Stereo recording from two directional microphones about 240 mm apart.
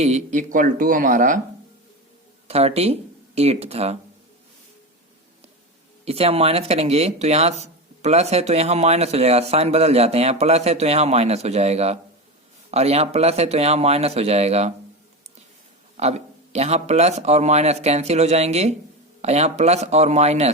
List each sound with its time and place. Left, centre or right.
0.0 s speech: right
2.5 s speech: right
6.1 s speech: right
16.0 s speech: right